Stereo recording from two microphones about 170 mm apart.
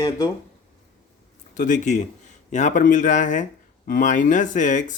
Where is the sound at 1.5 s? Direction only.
50° left (ahead or behind).